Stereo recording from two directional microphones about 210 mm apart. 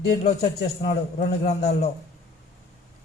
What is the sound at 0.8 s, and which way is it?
A man's voice, 30° left (ahead or behind).